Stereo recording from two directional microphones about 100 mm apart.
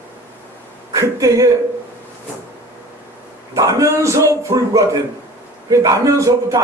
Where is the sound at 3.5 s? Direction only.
35° right (ahead or behind).